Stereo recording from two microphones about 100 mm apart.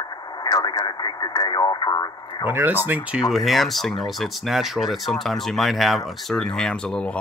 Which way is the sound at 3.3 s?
Centre (ahead or behind).